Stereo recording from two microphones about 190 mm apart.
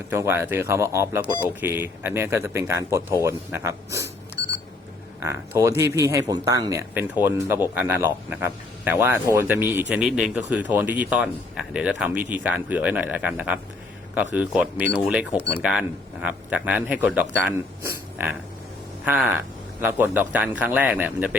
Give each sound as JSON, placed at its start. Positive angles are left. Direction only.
{"t": 0.1, "sound": "speech", "side_deg": -10}
{"t": 5.2, "sound": "speech", "side_deg": -15}